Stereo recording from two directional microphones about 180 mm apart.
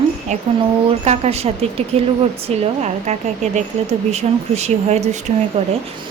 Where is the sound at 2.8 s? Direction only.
40° right (ahead or behind).